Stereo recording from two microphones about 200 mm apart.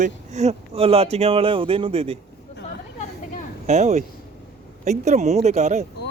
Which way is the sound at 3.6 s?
35° right (ahead or behind).